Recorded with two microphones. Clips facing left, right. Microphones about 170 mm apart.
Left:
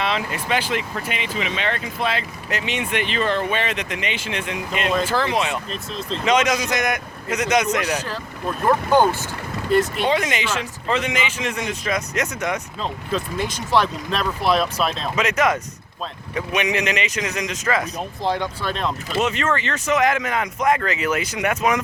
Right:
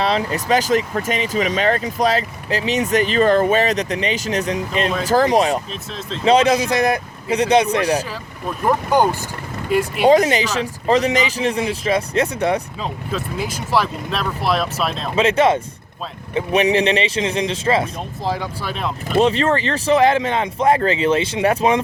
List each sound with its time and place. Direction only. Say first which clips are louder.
0.0 s speech: right 5 dB; 35° right (ahead or behind)
8.6 s speech: even; 15° right (ahead or behind)
10.1 s speech: right 8 dB; 35° right (ahead or behind)
12.8 s speech: even; 5° right (ahead or behind)
15.1 s speech: right 7 dB; 30° right (ahead or behind)
18.3 s speech: left 1 dB; 5° right (ahead or behind)
19.2 s speech: right 5 dB; 35° right (ahead or behind)